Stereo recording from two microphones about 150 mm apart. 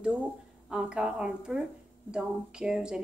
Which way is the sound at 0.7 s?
5° right (ahead or behind).